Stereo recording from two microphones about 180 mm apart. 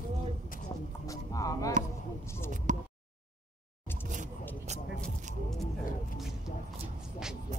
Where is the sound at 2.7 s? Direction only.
45° right (ahead or behind).